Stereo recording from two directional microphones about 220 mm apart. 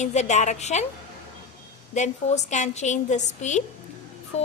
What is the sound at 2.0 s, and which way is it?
A woman's voice, 30° left (ahead or behind).